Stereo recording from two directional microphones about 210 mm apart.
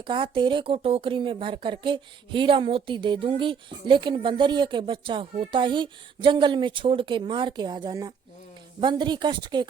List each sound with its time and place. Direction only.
0.0 s speech: 25° right (ahead or behind)